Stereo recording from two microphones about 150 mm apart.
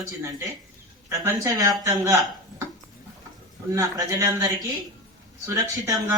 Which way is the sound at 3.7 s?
25° right (ahead or behind).